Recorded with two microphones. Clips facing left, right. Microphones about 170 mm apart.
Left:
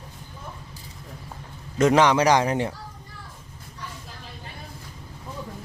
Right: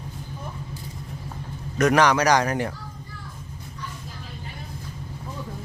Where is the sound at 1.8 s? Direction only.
25° left (ahead or behind).